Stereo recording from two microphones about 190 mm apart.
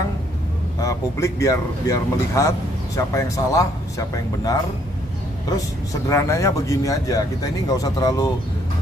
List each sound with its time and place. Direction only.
0.7 s speech: 15° left (ahead or behind)
6.0 s speech: 15° left (ahead or behind)